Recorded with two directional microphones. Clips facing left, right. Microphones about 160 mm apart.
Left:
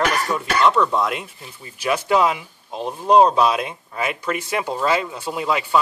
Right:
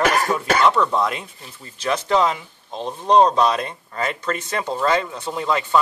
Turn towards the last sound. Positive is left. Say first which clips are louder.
# even
turn(degrees=5)  # may be behind; listen again after turning